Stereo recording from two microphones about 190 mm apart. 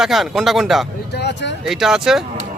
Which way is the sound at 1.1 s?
60° left (ahead or behind).